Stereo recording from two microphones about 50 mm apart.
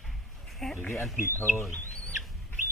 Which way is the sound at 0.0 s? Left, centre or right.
Centre.